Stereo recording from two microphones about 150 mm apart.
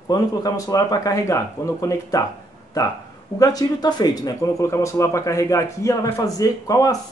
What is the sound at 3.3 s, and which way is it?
Speech, 25° left (ahead or behind).